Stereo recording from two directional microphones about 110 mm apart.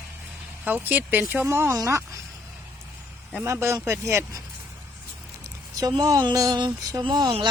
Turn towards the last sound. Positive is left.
turn(degrees=-40)  # may be behind; listen again after turning